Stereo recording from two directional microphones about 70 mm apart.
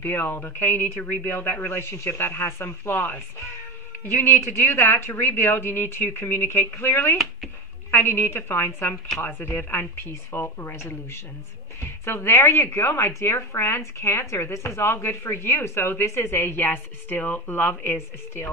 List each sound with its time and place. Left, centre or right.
0.0 s speech: left
4.2 s speech: left